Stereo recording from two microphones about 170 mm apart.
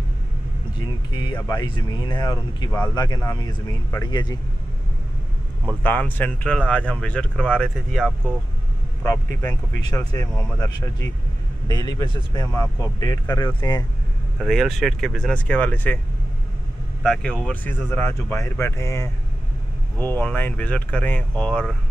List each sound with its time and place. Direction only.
0.7 s speech: 25° left (ahead or behind)
5.8 s speech: 10° left (ahead or behind)
9.0 s speech: 20° left (ahead or behind)
11.6 s speech: 25° left (ahead or behind)
14.4 s speech: centre (ahead or behind)
17.0 s speech: 5° left (ahead or behind)
20.2 s speech: 10° left (ahead or behind)